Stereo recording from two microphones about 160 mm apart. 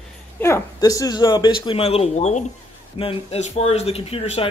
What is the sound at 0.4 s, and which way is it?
Speech, 15° left (ahead or behind).